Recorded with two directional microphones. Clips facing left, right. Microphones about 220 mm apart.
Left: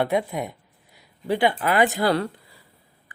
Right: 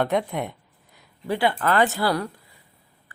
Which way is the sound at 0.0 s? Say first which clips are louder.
Even; 10° left (ahead or behind).